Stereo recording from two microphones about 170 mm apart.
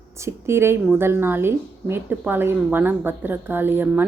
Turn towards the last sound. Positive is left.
turn(degrees=-10)  # may be behind; listen again after turning